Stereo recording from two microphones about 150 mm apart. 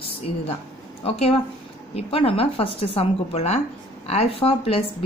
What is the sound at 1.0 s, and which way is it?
Speech, 40° left (ahead or behind).